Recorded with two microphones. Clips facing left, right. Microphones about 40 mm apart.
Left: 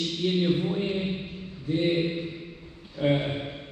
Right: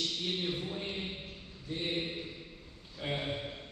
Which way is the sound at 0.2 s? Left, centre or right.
Left.